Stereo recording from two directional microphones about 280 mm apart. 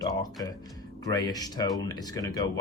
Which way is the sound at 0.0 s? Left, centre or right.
Centre.